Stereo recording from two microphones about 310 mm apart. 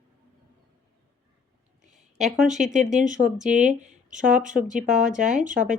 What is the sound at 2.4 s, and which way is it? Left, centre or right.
Speech, right.